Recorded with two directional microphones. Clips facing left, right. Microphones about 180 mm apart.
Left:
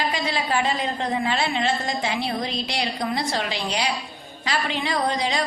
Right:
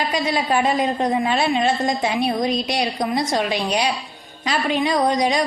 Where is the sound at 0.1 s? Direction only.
20° right (ahead or behind).